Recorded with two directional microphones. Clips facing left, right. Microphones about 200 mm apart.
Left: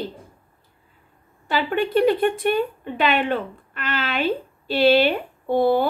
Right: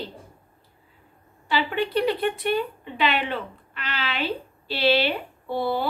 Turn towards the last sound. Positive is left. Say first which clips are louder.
# left 7 dB
turn(degrees=50)  # may be behind; listen again after turning